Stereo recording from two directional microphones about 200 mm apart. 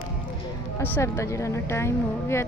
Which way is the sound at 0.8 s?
10° left (ahead or behind).